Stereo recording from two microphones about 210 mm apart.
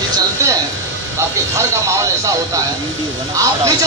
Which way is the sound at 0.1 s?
15° right (ahead or behind).